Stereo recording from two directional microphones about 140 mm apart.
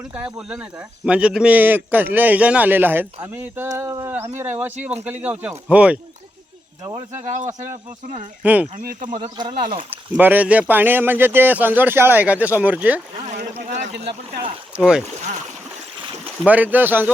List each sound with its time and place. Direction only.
0.1 s speech: 5° right (ahead or behind)
6.8 s speech: 30° right (ahead or behind)
7.3 s speech: 60° right (ahead or behind)
8.4 s speech: 10° right (ahead or behind)
8.7 s speech: 80° right
9.4 s speech: 35° right (ahead or behind)
9.9 s speech: 15° right (ahead or behind)
13.2 s boat: 55° right (ahead or behind)
14.8 s speech: 5° right (ahead or behind)
16.5 s speech: 10° right (ahead or behind)